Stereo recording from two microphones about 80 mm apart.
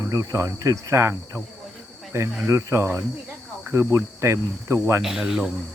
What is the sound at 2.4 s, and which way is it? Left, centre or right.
Cricket, right.